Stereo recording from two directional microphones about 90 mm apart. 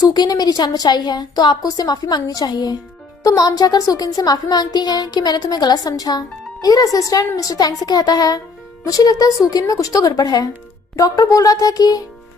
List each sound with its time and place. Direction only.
0.0 s a child's voice: 50° left (ahead or behind)